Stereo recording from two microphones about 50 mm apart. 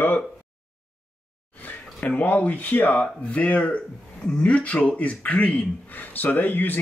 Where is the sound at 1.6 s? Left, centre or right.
Left.